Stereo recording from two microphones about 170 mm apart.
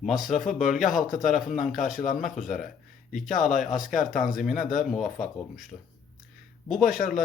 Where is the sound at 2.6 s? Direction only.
50° left (ahead or behind).